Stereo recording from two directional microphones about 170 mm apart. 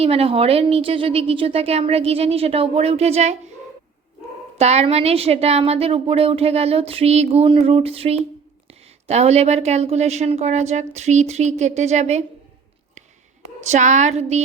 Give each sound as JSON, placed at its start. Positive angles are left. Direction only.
{"t": 0.0, "sound": "a woman's voice", "side_deg": -35}
{"t": 4.5, "sound": "a woman's voice", "side_deg": -40}
{"t": 13.6, "sound": "a woman's voice", "side_deg": -45}